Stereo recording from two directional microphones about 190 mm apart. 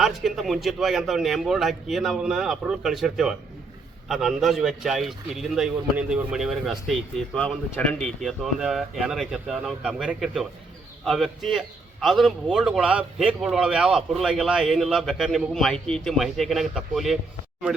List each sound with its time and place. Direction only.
0.0 s a man's voice: centre (ahead or behind)